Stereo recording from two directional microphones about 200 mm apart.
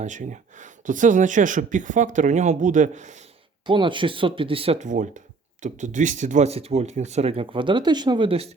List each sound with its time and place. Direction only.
0.0 s speech: 40° right (ahead or behind)
3.7 s speech: 25° right (ahead or behind)